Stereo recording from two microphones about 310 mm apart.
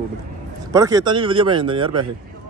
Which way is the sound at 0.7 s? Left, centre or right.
Centre.